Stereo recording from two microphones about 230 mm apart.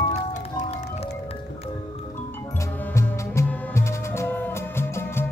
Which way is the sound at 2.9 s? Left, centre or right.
Centre.